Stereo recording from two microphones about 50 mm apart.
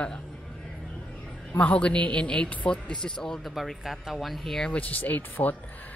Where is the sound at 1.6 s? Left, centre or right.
Left.